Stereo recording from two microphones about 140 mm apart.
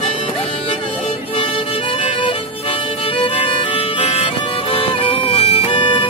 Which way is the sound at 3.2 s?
40° left (ahead or behind).